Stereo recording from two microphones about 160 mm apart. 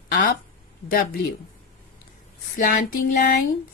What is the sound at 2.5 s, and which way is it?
Speech, 55° left (ahead or behind).